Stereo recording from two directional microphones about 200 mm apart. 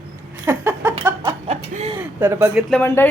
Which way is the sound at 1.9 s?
10° right (ahead or behind).